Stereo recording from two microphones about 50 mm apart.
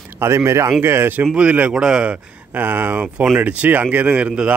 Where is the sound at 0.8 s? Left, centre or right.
Right.